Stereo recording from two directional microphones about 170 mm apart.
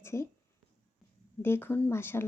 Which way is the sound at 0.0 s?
15° left (ahead or behind).